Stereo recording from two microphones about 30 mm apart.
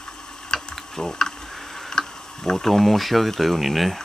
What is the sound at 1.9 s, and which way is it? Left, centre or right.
Insect, centre.